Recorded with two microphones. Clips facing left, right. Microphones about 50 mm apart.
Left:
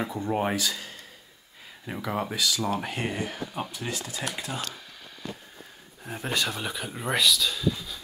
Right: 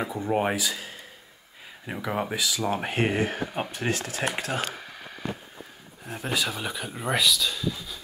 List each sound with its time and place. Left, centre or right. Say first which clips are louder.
0.0 s speech: right 2 dB; centre
2.7 s speech: right 4 dB; right
6.0 s speech: right 1 dB; centre